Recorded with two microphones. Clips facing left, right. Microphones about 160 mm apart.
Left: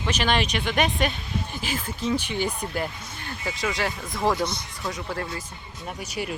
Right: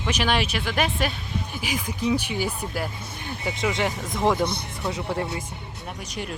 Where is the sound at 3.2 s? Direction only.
15° right (ahead or behind).